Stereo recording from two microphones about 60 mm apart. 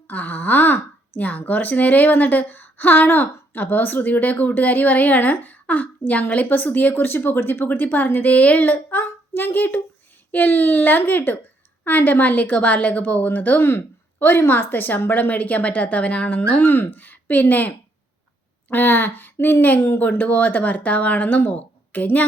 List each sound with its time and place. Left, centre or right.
0.1 s speech: left
14.2 s speech: left